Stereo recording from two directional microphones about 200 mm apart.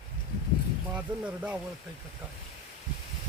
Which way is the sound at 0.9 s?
5° right (ahead or behind).